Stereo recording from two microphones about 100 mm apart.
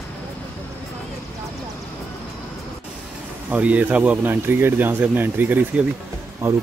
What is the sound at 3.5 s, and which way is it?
Speech, 15° right (ahead or behind).